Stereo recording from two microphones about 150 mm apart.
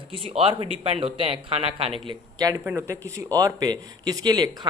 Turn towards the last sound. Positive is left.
turn(degrees=-25)  # may be behind; listen again after turning